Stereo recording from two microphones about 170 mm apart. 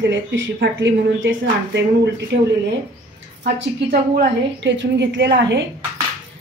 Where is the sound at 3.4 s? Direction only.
85° right.